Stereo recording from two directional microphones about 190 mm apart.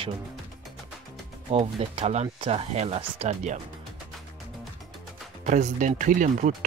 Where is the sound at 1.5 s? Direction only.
30° right (ahead or behind).